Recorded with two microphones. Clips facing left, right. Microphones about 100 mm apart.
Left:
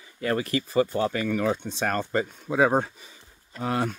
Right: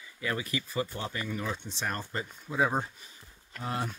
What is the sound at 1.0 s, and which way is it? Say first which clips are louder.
Speech: left 10 dB; 85° left.